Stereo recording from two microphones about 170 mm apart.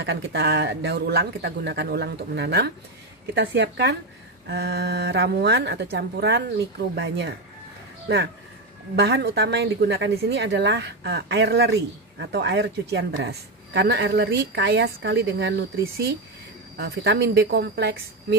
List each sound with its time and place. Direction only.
0.0 s a woman's voice: 85° right
3.3 s a woman's voice: 90° right
4.5 s a woman's voice: 75° right (ahead or behind); by 7.3 s 90° right
8.9 s a woman's voice: 80° right